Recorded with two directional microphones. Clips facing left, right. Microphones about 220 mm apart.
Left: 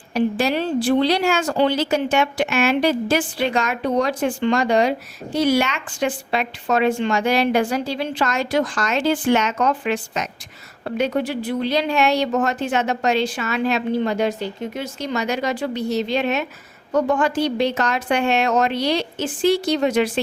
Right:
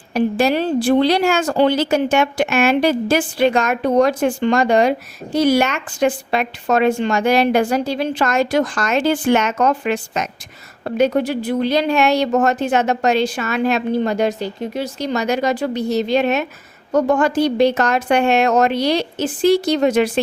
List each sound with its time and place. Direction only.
0.1 s speech: 45° right (ahead or behind)